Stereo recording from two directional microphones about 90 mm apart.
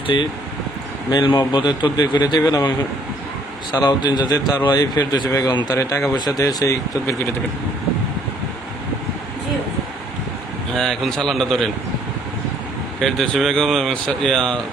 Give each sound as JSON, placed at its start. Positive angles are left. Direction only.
{"t": 0.1, "sound": "speech", "side_deg": 60}
{"t": 2.4, "sound": "speech", "side_deg": 40}
{"t": 3.7, "sound": "speech", "side_deg": 50}
{"t": 5.7, "sound": "speech", "side_deg": 35}
{"t": 6.1, "sound": "speech", "side_deg": 50}
{"t": 10.8, "sound": "speech", "side_deg": 5}
{"t": 13.0, "sound": "speech", "side_deg": 0}